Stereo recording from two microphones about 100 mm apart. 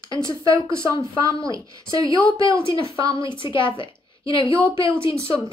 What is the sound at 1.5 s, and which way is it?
Speech, 35° right (ahead or behind).